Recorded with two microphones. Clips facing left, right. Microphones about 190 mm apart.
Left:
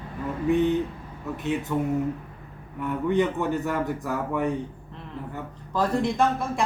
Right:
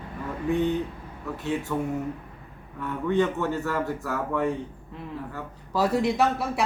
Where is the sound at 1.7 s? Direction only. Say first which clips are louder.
Left 3 dB; 15° left (ahead or behind).